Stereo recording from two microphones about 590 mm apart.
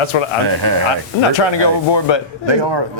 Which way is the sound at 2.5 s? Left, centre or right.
Right.